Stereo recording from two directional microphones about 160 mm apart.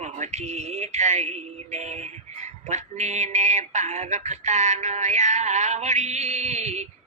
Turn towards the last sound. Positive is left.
turn(degrees=-45)  # may be behind; listen again after turning